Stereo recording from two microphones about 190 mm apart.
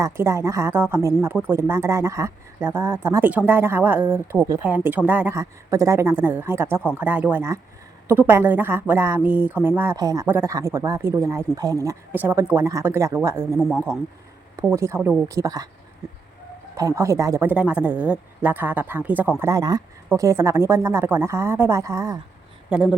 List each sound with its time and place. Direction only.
0.0 s speech: 15° right (ahead or behind)
14.7 s speech: 15° right (ahead or behind)
16.7 s speech: 15° right (ahead or behind)
22.7 s speech: 5° right (ahead or behind)